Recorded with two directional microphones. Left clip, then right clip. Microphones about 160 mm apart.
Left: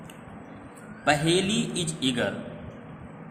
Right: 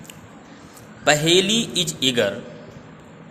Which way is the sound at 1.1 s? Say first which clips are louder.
Right 7 dB; 55° right (ahead or behind).